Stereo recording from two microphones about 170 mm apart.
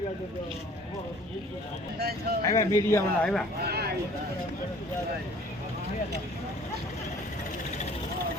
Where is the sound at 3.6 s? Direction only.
70° right (ahead or behind).